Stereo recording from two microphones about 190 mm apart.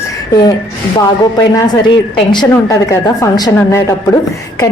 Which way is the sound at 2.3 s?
20° left (ahead or behind).